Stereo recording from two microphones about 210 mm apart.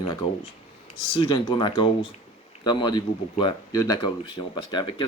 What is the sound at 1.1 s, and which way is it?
Speech, 25° left (ahead or behind).